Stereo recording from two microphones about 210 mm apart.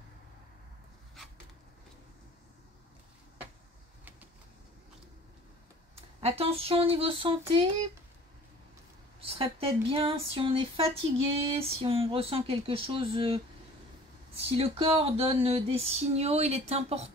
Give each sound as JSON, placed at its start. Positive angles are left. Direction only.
{"t": 6.2, "sound": "speech", "side_deg": -30}
{"t": 9.2, "sound": "speech", "side_deg": -25}
{"t": 14.6, "sound": "speech", "side_deg": -25}